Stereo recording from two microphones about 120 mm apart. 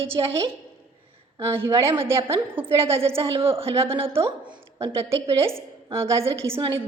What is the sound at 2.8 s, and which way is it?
A woman's voice, 50° right (ahead or behind).